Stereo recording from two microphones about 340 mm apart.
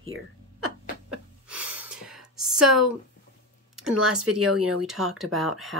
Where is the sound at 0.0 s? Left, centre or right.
Right.